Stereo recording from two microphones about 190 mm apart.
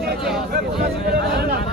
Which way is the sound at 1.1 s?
55° right (ahead or behind).